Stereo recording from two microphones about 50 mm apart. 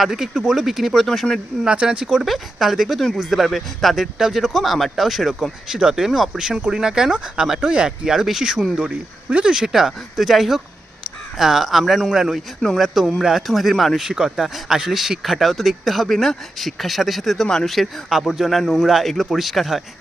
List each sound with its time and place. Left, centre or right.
0.0 s speech: centre
1.6 s speech: centre
2.0 s speech: centre
14.0 s speech: centre
18.1 s speech: centre